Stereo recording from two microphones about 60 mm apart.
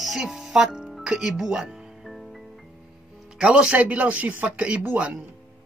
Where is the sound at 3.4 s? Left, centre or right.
Centre.